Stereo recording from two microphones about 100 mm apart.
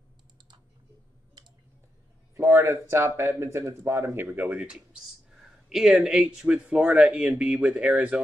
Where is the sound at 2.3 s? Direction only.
30° right (ahead or behind).